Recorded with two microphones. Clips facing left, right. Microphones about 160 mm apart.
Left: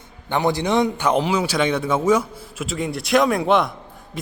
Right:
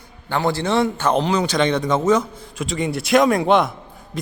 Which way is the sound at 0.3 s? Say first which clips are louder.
Even; 20° left (ahead or behind).